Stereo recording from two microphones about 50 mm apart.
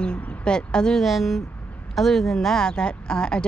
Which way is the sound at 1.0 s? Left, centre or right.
Centre.